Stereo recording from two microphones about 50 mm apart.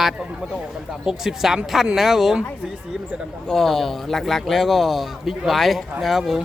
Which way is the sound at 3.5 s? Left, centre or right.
Centre.